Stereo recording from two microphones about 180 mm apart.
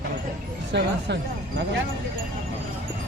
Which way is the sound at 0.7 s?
70° right (ahead or behind).